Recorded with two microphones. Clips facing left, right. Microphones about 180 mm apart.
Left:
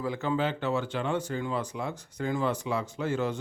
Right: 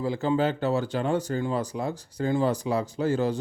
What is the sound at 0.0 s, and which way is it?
Speech, 30° right (ahead or behind).